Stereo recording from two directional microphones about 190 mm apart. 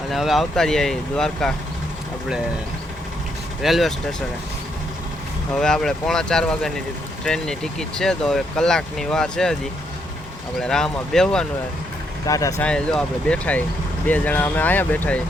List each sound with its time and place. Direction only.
0.1 s speech: centre (ahead or behind)
3.6 s speech: centre (ahead or behind)
5.5 s speech: 5° left (ahead or behind)
10.6 s speech: 5° left (ahead or behind)
12.2 s speech: 15° left (ahead or behind)
12.6 s speech: 5° left (ahead or behind)